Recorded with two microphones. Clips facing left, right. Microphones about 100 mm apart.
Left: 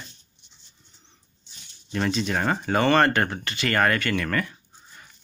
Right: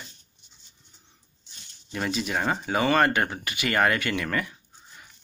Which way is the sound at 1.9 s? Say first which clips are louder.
Left 3 dB; 10° right (ahead or behind).